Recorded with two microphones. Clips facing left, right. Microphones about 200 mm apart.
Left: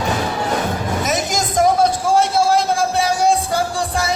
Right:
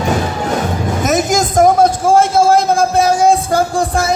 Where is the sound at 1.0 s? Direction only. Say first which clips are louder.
Right 10 dB; 50° right (ahead or behind).